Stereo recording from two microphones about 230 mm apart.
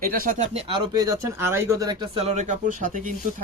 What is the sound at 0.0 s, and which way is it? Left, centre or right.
Speech, right.